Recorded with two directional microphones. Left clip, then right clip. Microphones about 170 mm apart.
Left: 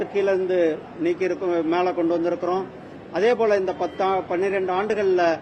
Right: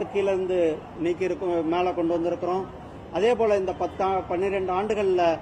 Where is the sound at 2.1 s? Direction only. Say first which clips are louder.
Left 3 dB; 10° right (ahead or behind).